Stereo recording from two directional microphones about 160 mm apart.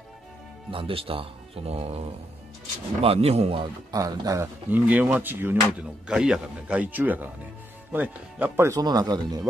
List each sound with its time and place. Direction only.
0.7 s speech: 35° right (ahead or behind)
3.9 s speech: 25° right (ahead or behind)